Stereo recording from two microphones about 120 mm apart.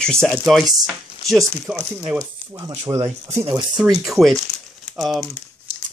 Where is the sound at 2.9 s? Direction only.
30° right (ahead or behind).